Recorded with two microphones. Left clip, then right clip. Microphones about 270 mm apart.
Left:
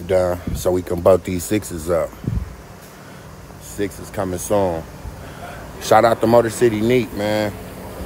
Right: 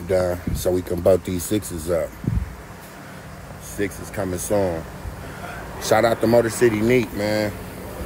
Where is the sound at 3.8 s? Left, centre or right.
Centre.